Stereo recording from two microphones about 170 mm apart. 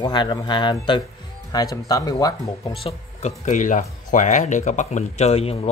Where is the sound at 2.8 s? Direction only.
40° left (ahead or behind).